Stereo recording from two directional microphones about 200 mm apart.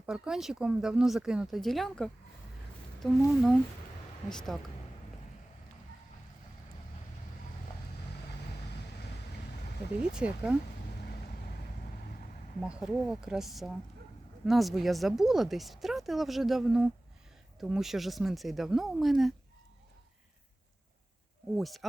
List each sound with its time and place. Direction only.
0.0 s speech: 5° right (ahead or behind)
10.1 s speech: 5° right (ahead or behind)
11.0 s vehicle: 50° left (ahead or behind)
12.6 s speech: 5° right (ahead or behind)
21.5 s speech: centre (ahead or behind)